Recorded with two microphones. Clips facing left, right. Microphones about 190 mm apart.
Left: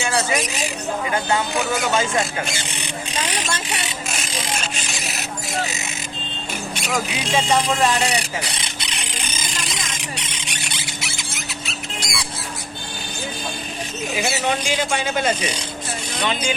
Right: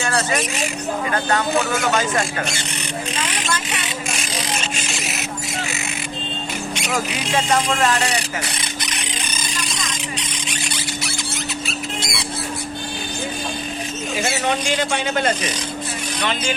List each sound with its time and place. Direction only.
0.0 s speech: 10° left (ahead or behind)
3.2 s a sound: 25° left (ahead or behind)
11.9 s squawk: 25° right (ahead or behind)
14.3 s speech: 5° left (ahead or behind)